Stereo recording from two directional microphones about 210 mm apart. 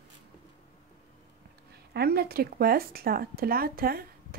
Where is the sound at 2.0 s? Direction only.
50° right (ahead or behind).